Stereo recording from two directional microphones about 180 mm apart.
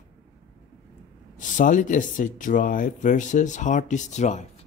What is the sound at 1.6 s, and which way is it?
Speech, 45° left (ahead or behind).